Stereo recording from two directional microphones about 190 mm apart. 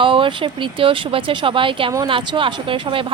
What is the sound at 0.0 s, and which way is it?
A woman's voice, 25° right (ahead or behind).